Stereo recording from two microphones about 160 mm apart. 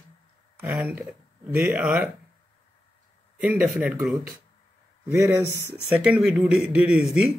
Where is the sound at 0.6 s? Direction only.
10° right (ahead or behind).